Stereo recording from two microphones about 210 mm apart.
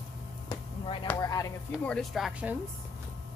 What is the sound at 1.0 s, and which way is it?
Speech, 15° left (ahead or behind).